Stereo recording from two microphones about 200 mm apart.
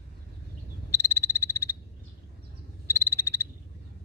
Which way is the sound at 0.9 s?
15° left (ahead or behind).